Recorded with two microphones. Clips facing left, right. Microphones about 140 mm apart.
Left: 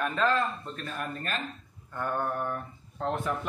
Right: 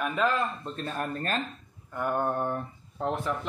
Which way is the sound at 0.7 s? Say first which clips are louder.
Right 4 dB; 35° right (ahead or behind).